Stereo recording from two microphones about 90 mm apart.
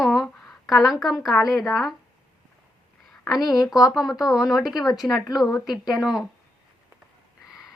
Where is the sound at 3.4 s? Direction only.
45° left (ahead or behind).